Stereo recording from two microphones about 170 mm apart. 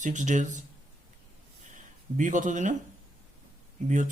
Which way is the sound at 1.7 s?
50° right (ahead or behind).